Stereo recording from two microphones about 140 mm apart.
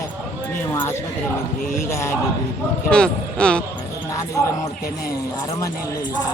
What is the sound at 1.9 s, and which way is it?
Speech, 20° left (ahead or behind).